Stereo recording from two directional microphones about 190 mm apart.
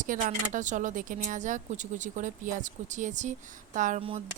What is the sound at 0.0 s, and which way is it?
Speech, 45° right (ahead or behind).